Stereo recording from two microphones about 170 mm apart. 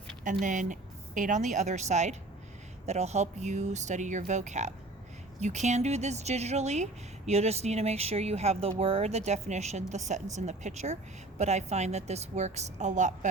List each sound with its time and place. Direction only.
0.3 s speech: 45° right (ahead or behind)